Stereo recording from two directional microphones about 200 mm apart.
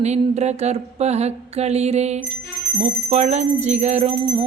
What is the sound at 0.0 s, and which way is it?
Jingle bell, 35° right (ahead or behind).